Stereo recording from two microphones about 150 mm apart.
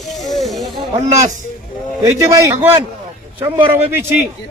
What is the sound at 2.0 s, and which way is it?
Speech, 20° right (ahead or behind).